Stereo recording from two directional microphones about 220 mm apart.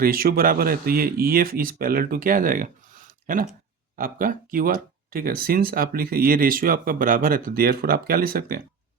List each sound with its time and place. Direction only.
0.0 s speech: 40° right (ahead or behind)